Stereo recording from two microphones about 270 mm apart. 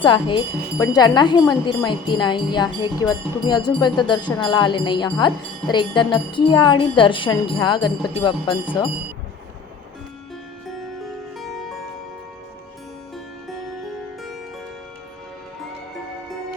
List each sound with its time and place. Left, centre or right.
0.0 s speech: centre
11.3 s music: centre